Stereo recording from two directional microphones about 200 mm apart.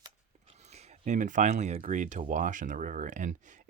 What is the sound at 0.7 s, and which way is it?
Speech, 35° right (ahead or behind).